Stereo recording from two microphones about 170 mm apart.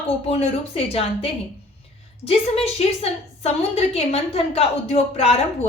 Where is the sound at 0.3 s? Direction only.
35° left (ahead or behind).